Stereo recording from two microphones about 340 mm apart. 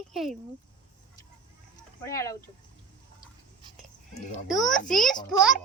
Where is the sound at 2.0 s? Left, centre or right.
Centre.